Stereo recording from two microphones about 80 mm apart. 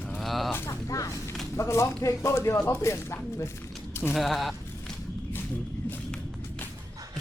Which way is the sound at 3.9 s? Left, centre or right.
Left.